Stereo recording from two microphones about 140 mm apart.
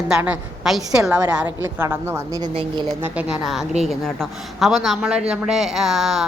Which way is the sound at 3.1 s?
5° right (ahead or behind).